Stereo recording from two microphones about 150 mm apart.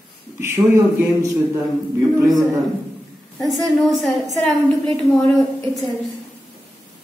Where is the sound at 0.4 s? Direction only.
15° right (ahead or behind).